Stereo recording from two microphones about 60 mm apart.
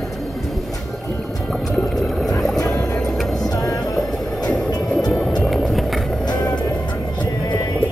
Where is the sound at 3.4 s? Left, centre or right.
Left.